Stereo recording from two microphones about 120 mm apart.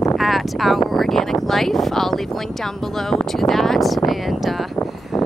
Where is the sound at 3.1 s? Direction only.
Centre (ahead or behind).